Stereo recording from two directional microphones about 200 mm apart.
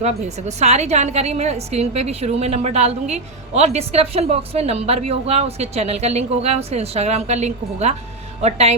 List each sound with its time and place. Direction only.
0.0 s a woman's voice: 35° right (ahead or behind)